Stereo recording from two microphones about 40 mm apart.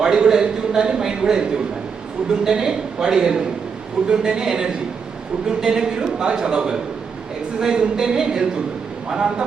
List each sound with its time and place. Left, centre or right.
0.0 s a man's voice: centre